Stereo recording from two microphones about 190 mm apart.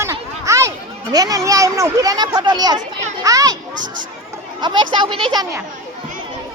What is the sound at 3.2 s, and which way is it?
Speech, 20° right (ahead or behind).